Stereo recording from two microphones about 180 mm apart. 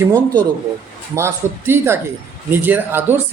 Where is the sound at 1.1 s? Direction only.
15° right (ahead or behind).